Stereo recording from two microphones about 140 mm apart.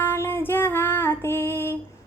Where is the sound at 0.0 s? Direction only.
15° left (ahead or behind).